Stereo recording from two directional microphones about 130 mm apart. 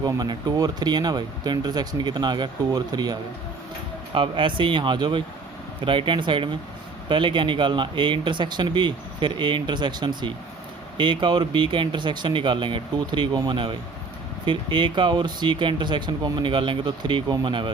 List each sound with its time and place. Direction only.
0.0 s speech: 30° right (ahead or behind)